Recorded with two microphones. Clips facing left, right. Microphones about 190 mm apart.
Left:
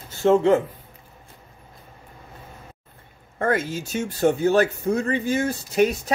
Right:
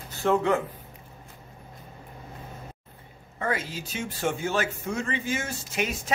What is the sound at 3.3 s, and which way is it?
Speech, 50° left (ahead or behind).